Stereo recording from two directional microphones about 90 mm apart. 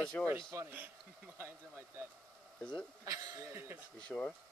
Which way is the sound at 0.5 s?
35° right (ahead or behind).